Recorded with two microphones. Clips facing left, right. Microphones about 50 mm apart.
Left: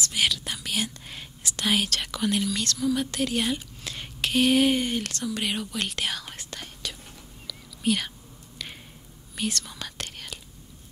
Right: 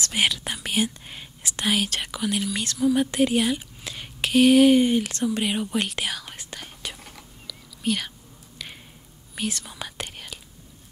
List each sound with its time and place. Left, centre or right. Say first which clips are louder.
0.1 s speech: right 3 dB; right
1.4 s speech: right 1 dB; right
1.9 s speech: even; centre
2.5 s speech: right 4 dB; centre
3.3 s speech: right 4 dB; centre
5.1 s speech: right 4 dB; right
6.0 s whispering: even; centre
9.4 s whispering: even; centre